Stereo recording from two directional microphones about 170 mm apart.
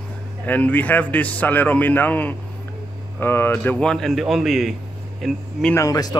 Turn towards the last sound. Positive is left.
turn(degrees=20)  # may be behind; listen again after turning